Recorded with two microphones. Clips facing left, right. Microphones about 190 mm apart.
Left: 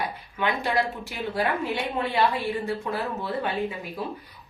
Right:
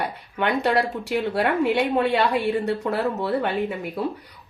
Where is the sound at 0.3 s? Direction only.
65° right (ahead or behind).